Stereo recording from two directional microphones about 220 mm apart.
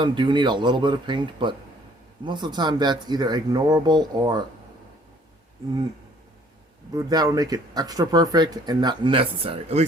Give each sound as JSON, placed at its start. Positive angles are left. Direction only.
{"t": 0.0, "sound": "speech", "side_deg": -20}
{"t": 6.9, "sound": "speech", "side_deg": -15}